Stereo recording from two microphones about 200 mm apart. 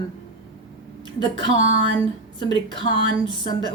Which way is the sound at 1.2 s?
20° left (ahead or behind).